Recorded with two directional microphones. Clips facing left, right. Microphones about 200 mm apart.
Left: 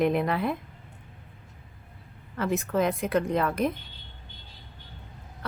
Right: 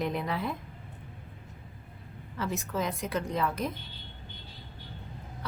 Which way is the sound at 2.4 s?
60° left (ahead or behind).